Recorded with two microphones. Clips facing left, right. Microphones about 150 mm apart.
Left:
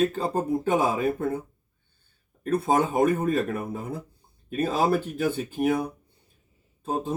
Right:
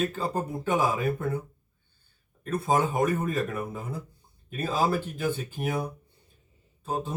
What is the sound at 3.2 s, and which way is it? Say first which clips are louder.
A man's voice: left 4 dB; 50° left (ahead or behind).